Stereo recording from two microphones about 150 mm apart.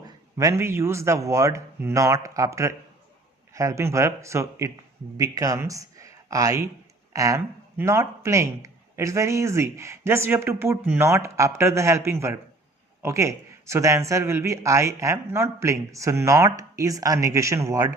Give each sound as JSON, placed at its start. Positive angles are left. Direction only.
{"t": 0.3, "sound": "a man's voice", "side_deg": -20}